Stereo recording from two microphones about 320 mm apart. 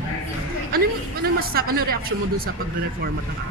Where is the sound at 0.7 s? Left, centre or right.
Right.